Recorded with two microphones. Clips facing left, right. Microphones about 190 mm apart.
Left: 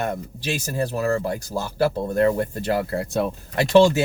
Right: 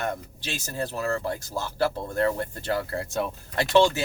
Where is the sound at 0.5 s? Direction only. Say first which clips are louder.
Left 5 dB; 15° left (ahead or behind).